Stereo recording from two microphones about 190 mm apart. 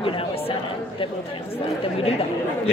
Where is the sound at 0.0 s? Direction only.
30° left (ahead or behind).